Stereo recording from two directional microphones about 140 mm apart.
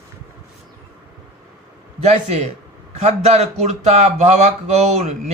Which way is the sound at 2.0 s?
50° right (ahead or behind).